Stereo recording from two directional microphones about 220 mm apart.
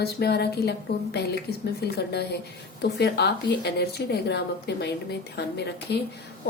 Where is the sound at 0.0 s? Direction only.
45° left (ahead or behind).